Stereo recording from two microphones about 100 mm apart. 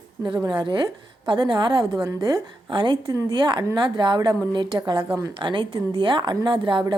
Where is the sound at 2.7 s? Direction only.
55° right (ahead or behind).